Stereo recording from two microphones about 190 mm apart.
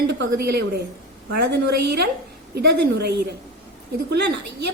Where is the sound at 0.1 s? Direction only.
60° right (ahead or behind).